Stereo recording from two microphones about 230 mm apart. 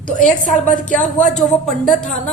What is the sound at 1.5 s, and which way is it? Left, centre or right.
Speech, centre.